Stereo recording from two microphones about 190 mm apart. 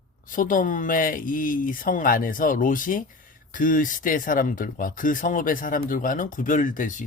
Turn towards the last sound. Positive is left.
turn(degrees=45)  # may be behind; listen again after turning